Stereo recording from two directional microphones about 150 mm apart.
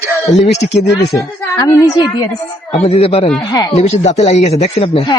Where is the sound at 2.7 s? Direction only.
40° left (ahead or behind).